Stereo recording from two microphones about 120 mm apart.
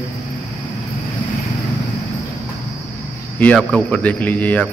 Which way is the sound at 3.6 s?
10° left (ahead or behind).